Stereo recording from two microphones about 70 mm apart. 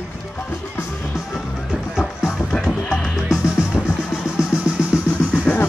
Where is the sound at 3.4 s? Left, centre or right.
Centre.